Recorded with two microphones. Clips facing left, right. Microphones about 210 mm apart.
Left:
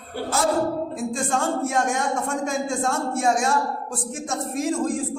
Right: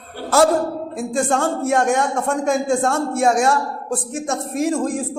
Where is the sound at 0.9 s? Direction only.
65° right (ahead or behind).